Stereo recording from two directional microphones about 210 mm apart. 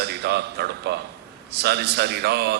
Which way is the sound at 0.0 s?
50° right (ahead or behind).